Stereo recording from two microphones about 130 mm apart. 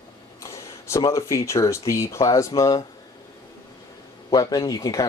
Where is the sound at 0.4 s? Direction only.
25° left (ahead or behind).